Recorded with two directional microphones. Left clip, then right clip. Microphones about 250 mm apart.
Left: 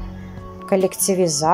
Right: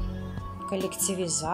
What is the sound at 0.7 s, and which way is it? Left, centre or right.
Speech, centre.